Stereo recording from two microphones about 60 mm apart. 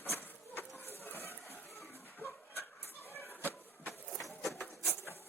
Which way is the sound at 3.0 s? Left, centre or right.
Left.